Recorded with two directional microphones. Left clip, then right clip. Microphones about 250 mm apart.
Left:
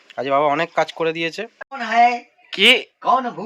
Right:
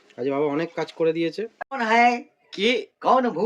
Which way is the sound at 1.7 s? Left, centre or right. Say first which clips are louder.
Left 3 dB; centre.